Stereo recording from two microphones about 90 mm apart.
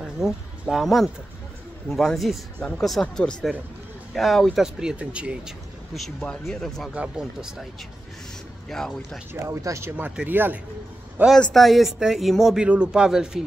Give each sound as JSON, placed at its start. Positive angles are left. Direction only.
{"t": 0.0, "sound": "speech", "side_deg": -5}
{"t": 5.9, "sound": "speech", "side_deg": 0}
{"t": 6.9, "sound": "speech", "side_deg": -10}
{"t": 8.6, "sound": "speech", "side_deg": 5}
{"t": 9.3, "sound": "speech", "side_deg": -35}
{"t": 11.3, "sound": "speech", "side_deg": 5}